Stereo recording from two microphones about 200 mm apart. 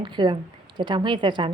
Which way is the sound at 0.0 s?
25° right (ahead or behind).